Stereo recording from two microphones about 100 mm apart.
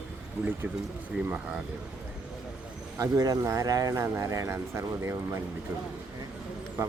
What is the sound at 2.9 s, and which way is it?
Speech, 35° right (ahead or behind).